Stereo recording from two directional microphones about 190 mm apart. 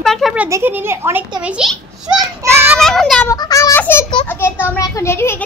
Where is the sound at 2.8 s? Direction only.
Centre (ahead or behind).